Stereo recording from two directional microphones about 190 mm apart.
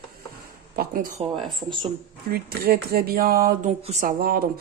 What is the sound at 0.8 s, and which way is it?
Speech, 45° right (ahead or behind).